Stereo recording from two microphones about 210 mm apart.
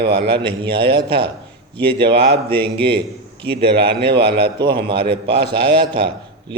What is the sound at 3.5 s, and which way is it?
A man's voice, 50° right (ahead or behind).